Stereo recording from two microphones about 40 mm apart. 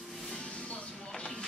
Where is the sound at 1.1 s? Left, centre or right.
Left.